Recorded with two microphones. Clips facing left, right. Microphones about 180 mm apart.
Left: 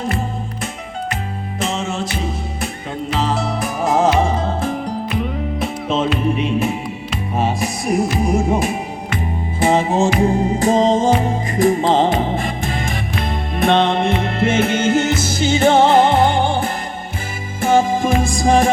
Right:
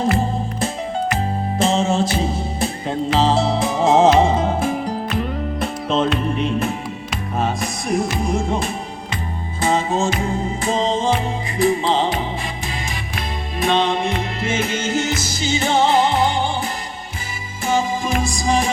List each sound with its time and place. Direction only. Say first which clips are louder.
1.5 s music: right 5 dB; 30° right (ahead or behind); by 7.9 s 5° left (ahead or behind)
9.6 s music: left 4 dB; 15° left (ahead or behind)
10.2 s music: left 7 dB; 40° left (ahead or behind)